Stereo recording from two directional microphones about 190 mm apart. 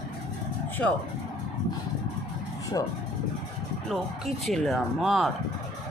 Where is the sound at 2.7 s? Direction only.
20° left (ahead or behind).